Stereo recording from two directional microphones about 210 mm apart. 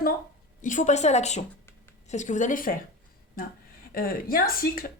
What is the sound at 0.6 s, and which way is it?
Speech, 35° left (ahead or behind).